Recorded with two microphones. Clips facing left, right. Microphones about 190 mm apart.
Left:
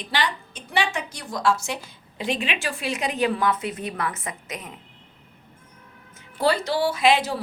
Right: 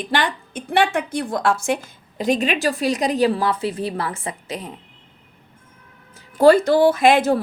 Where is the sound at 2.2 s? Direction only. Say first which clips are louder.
Right 8 dB; 40° right (ahead or behind).